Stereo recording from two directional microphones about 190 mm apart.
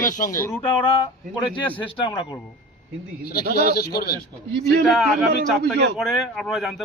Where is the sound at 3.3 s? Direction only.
55° left (ahead or behind).